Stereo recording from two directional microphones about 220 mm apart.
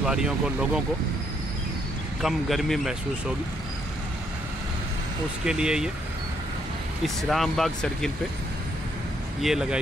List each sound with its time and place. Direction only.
0.0 s speech: 5° right (ahead or behind)
2.2 s speech: centre (ahead or behind)
5.4 s speech: 5° right (ahead or behind)
7.2 s speech: centre (ahead or behind)
9.4 s speech: centre (ahead or behind)